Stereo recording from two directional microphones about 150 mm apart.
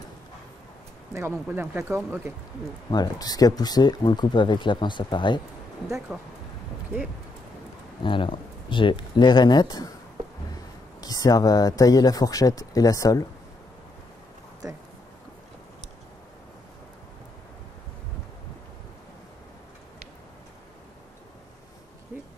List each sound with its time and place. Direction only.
1.1 s speech: 15° right (ahead or behind)
2.9 s speech: 25° left (ahead or behind)
6.1 s speech: 5° right (ahead or behind)
8.0 s speech: 35° left (ahead or behind)
11.0 s speech: 25° left (ahead or behind)
14.6 s speech: 25° right (ahead or behind)
22.1 s a sound: 10° right (ahead or behind)